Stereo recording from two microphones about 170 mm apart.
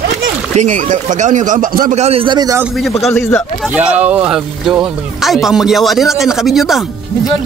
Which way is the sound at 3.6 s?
5° right (ahead or behind).